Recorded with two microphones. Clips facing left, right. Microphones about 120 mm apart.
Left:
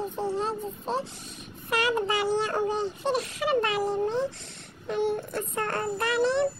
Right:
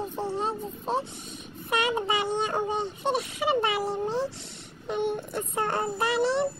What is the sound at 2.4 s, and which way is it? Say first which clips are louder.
Speech: left 1 dB; 20° right (ahead or behind).